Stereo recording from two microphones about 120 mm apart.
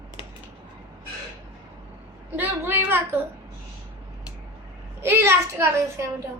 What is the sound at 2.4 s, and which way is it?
Speech, 20° right (ahead or behind).